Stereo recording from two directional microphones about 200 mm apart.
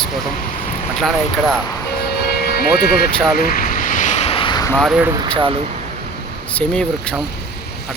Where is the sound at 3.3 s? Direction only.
45° left (ahead or behind); by 4.7 s 20° left (ahead or behind).